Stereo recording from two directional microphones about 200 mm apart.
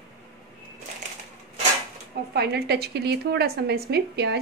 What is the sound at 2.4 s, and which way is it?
A woman's voice, 55° right (ahead or behind).